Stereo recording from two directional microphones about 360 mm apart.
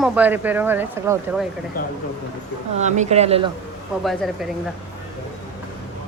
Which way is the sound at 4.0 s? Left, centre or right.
Centre.